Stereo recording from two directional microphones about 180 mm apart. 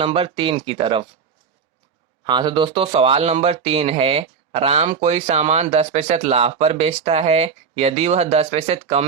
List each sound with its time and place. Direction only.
0.0 s speech: 30° right (ahead or behind)
2.2 s speech: 25° right (ahead or behind)